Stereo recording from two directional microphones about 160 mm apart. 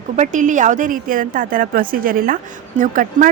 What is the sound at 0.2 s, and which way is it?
A woman's voice, 50° right (ahead or behind).